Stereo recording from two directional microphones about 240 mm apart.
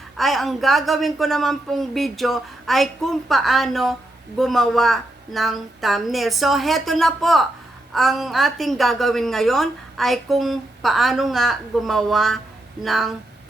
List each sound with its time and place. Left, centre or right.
0.2 s a woman's voice: centre